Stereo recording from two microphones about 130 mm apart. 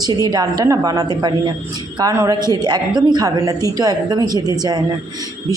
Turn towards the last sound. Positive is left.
turn(degrees=-30)  # may be behind; listen again after turning